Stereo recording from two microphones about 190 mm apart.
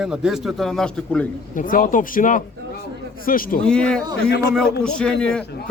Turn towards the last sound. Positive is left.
turn(degrees=5)  # may be behind; listen again after turning